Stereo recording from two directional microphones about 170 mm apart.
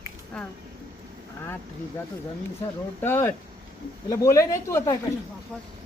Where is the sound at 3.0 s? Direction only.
15° left (ahead or behind).